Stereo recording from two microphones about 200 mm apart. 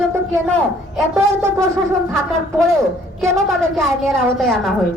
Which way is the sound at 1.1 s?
15° right (ahead or behind).